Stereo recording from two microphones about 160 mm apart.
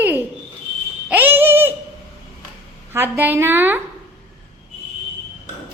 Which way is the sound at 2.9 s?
15° right (ahead or behind).